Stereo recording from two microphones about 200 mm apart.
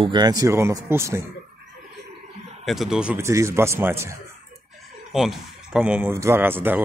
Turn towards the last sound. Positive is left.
turn(degrees=-10)  # may be behind; listen again after turning